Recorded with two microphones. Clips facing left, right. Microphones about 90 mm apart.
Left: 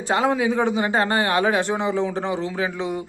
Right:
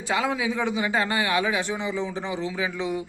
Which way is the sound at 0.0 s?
40° left (ahead or behind).